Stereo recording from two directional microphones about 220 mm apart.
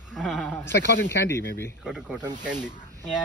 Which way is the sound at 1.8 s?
Centre (ahead or behind).